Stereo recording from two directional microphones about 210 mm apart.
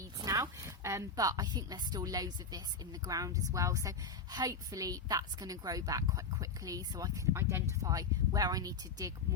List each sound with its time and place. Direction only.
0.2 s a woman's voice: 15° right (ahead or behind)